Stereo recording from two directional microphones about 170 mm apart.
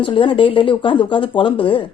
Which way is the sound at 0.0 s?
30° left (ahead or behind).